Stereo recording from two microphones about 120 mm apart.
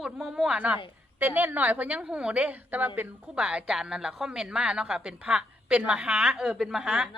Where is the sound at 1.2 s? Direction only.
15° right (ahead or behind).